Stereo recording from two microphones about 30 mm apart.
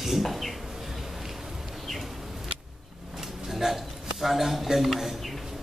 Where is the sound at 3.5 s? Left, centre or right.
Centre.